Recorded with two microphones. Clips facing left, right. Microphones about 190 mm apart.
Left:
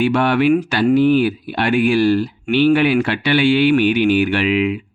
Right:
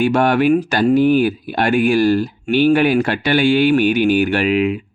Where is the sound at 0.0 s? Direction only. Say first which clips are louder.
Right 1 dB; 45° right (ahead or behind).